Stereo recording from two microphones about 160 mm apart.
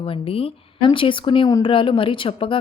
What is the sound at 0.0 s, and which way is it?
Speech, 35° left (ahead or behind).